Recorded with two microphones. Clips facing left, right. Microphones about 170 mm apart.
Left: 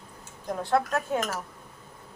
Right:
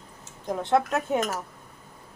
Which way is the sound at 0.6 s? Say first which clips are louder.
Right 2 dB; 20° right (ahead or behind).